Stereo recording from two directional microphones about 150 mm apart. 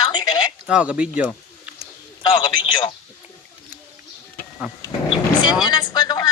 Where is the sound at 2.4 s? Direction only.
30° left (ahead or behind).